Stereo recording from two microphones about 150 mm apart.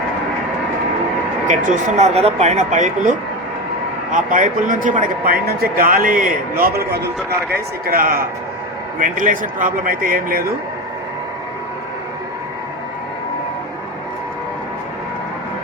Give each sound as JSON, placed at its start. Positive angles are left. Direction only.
{"t": 1.5, "sound": "a man's voice", "side_deg": -55}
{"t": 7.5, "sound": "a man's voice", "side_deg": -75}